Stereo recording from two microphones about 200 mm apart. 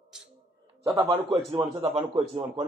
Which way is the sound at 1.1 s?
25° right (ahead or behind).